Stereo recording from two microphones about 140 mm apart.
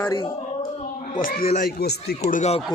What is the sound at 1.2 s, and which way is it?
Speech, 85° left.